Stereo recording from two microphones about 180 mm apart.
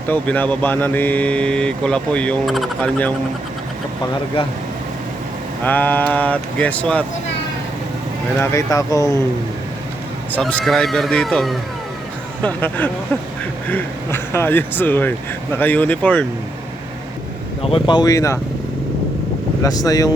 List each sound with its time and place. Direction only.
0.1 s speech: 10° left (ahead or behind)
4.4 s speech: 30° left (ahead or behind)
5.6 s speech: 10° left (ahead or behind)
8.4 s speech: 15° left (ahead or behind)
10.4 s speech: centre (ahead or behind)
17.6 s speech: 30° left (ahead or behind)
19.6 s speech: 20° left (ahead or behind)